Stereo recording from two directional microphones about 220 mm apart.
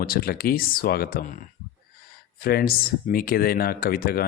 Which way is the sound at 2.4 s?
45° left (ahead or behind).